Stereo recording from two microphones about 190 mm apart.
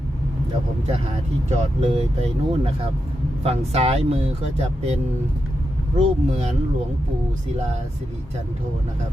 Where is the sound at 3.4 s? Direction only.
30° right (ahead or behind).